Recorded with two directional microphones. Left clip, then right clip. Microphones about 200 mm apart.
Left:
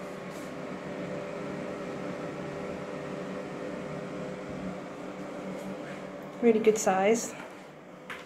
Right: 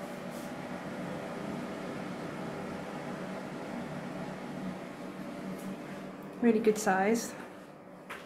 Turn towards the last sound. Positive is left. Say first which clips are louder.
# left 4 dB
turn(degrees=-10)  # may be behind; listen again after turning